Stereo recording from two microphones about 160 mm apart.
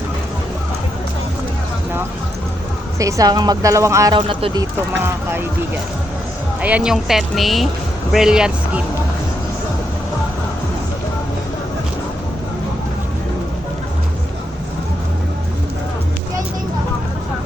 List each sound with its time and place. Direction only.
3.0 s speech: 20° right (ahead or behind)
5.0 s speech: 15° right (ahead or behind)
6.6 s speech: 10° right (ahead or behind)